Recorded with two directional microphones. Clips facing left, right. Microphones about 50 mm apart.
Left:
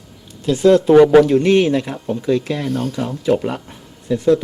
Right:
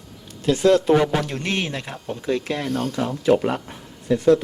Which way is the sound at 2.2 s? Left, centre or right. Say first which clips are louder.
Left 4 dB; right.